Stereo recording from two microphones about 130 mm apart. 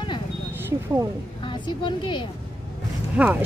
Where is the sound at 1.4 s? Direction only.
35° left (ahead or behind).